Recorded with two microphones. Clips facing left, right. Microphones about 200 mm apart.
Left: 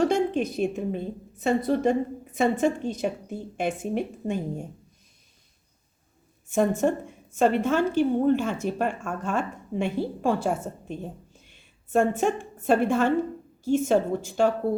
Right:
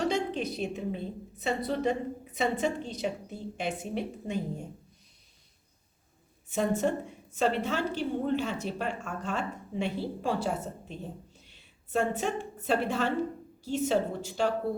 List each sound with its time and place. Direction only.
0.0 s a woman's voice: 50° left (ahead or behind)
6.5 s a woman's voice: 50° left (ahead or behind)
11.3 s a sound: 50° left (ahead or behind)
12.6 s a woman's voice: 50° left (ahead or behind)